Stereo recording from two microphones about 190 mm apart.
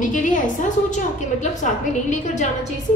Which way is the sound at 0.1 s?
40° left (ahead or behind).